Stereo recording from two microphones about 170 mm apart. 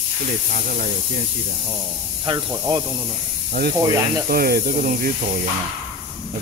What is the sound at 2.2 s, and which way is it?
Speech, 20° right (ahead or behind).